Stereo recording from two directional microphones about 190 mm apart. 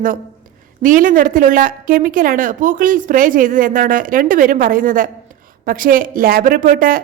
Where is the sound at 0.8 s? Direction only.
45° right (ahead or behind).